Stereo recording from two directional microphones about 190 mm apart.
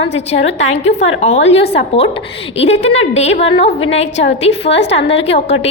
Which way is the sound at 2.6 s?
35° left (ahead or behind).